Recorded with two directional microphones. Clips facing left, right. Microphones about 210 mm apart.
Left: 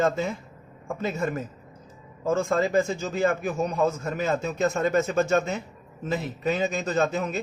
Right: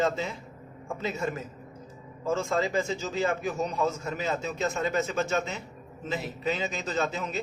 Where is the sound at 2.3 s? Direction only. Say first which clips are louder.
Left 4 dB; 50° left (ahead or behind).